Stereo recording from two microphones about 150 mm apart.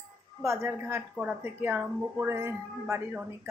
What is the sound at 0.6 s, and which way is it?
Speech, 10° right (ahead or behind).